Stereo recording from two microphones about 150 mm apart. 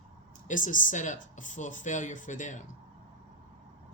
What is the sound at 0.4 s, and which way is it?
Speech, 60° left (ahead or behind).